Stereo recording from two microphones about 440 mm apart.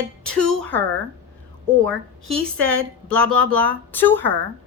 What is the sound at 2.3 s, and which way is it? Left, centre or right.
A woman's voice, right.